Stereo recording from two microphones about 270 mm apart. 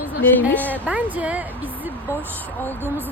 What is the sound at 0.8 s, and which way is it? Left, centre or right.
Speech, centre.